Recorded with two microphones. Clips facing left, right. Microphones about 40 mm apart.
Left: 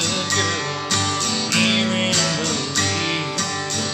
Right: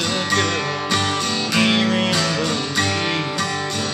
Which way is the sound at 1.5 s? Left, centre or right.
Centre.